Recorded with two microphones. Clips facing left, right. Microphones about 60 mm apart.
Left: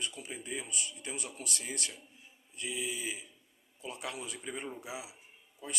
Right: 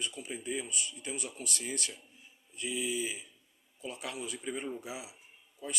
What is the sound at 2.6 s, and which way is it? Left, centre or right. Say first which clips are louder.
Speech: right 3 dB; left.